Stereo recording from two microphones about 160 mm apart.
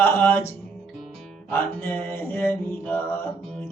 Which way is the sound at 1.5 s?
10° left (ahead or behind).